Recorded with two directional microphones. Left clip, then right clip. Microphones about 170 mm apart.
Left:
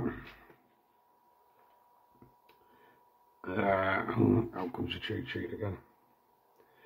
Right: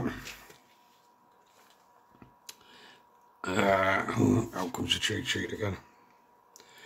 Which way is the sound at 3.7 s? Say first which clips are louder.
Right 3 dB; 5° right (ahead or behind).